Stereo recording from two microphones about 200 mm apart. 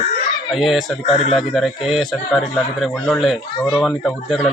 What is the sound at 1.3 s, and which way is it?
A man's voice, centre (ahead or behind).